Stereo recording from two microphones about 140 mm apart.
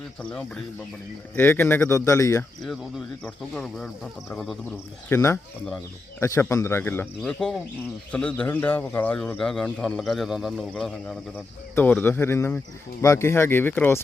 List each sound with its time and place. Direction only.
0.2 s speech: 10° left (ahead or behind)
3.2 s a man's voice: 5° left (ahead or behind)
5.0 s speech: 20° left (ahead or behind)
7.2 s a man's voice: 5° left (ahead or behind)
11.7 s speech: 10° left (ahead or behind)